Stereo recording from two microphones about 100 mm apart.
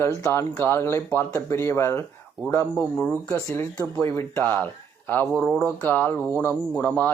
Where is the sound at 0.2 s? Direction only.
20° left (ahead or behind).